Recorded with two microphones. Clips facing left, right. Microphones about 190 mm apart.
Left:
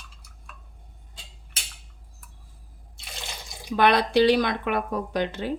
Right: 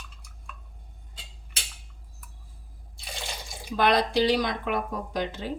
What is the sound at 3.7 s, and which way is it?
Speech, 65° left (ahead or behind).